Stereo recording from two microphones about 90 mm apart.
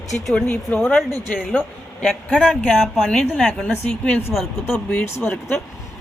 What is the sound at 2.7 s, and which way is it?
Speech, centre (ahead or behind).